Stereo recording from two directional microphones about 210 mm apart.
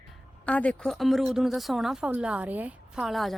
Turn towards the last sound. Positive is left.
turn(degrees=0)  # may be behind; listen again after turning